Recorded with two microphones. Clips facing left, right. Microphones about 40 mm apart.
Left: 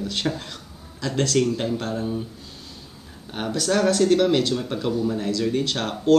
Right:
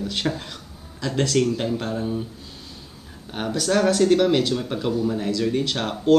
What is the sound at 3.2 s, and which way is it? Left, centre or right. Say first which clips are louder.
Speech: even; centre.